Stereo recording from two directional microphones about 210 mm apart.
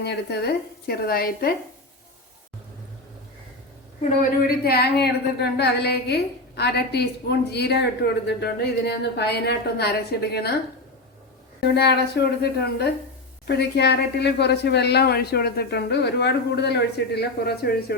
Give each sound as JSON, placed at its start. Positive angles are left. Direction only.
{"t": 0.0, "sound": "a woman's voice", "side_deg": 50}
{"t": 4.2, "sound": "a woman's voice", "side_deg": 45}
{"t": 11.7, "sound": "a woman's voice", "side_deg": 50}